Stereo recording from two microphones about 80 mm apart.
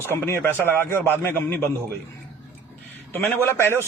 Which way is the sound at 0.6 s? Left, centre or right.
Left.